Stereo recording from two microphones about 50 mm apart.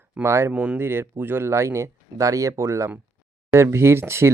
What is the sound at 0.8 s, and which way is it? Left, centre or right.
Speech, right.